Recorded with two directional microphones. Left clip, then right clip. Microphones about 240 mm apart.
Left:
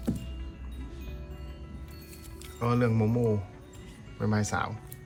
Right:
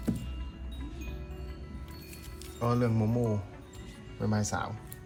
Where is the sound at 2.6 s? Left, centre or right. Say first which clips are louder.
Left 2 dB; centre.